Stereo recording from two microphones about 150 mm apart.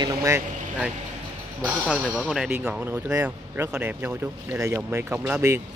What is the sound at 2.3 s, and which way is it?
Speech, 5° right (ahead or behind).